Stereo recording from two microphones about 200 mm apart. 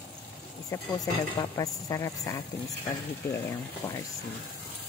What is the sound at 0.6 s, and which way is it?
Speech, 15° left (ahead or behind).